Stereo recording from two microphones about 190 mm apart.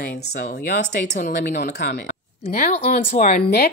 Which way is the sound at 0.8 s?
40° left (ahead or behind).